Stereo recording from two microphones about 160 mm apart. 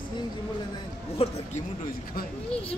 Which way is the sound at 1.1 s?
40° left (ahead or behind).